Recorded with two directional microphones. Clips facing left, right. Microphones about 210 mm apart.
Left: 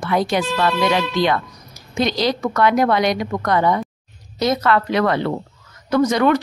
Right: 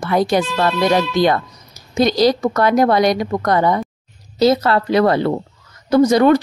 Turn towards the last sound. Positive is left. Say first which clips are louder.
# right 4 dB
turn(degrees=-35)  # may be behind; listen again after turning